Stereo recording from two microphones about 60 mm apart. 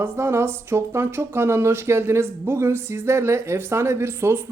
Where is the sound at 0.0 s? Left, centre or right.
Right.